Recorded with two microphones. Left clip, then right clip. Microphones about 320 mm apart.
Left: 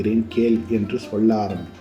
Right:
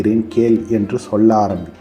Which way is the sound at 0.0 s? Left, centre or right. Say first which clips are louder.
Right 5 dB; centre.